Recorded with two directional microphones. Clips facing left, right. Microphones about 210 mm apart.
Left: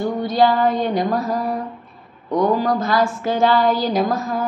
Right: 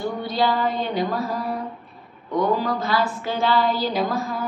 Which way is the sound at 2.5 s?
45° left (ahead or behind).